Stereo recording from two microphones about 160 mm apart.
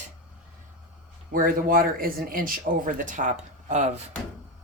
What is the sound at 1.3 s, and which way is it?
Speech, 60° right (ahead or behind).